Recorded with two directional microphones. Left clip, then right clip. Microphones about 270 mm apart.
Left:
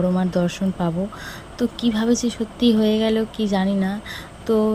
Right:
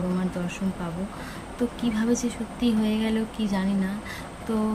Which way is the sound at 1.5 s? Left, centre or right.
Centre.